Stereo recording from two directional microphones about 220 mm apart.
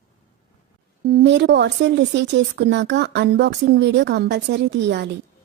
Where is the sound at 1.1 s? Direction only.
50° right (ahead or behind).